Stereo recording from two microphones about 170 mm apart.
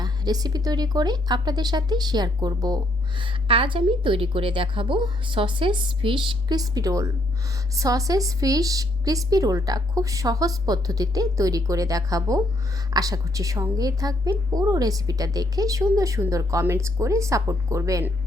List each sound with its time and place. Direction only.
0.0 s speech: 25° right (ahead or behind)